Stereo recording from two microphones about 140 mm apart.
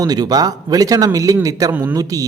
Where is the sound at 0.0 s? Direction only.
25° right (ahead or behind).